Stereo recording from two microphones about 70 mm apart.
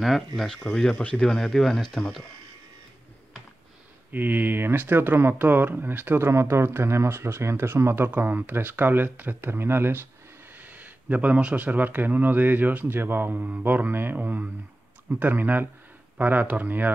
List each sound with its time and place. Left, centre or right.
0.0 s speech: centre
0.9 s speech: centre
1.2 s speech: centre
4.1 s speech: right